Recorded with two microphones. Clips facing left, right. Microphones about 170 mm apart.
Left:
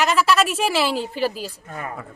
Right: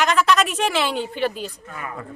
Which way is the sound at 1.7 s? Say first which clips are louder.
Left 2 dB; 40° left (ahead or behind).